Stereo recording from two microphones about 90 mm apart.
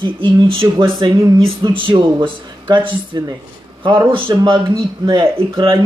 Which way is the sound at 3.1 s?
50° right (ahead or behind).